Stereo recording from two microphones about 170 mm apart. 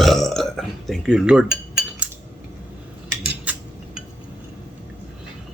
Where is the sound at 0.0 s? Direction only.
Centre (ahead or behind).